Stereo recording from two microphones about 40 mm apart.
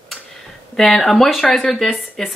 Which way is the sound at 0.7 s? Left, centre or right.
Centre.